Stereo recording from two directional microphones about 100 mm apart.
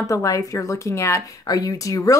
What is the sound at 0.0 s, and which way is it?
A woman's voice, 35° left (ahead or behind).